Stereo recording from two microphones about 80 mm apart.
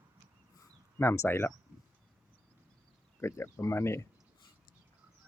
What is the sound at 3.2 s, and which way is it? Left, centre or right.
Speech, left.